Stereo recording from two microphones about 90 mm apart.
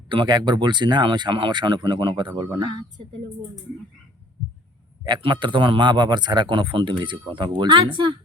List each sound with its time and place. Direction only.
0.1 s speech: 60° right (ahead or behind)
5.0 s speech: 60° right (ahead or behind)